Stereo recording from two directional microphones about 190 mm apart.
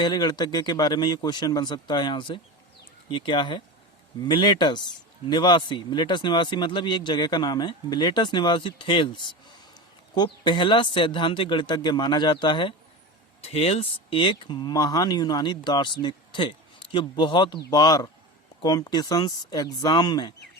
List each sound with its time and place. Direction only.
0.0 s speech: 25° left (ahead or behind)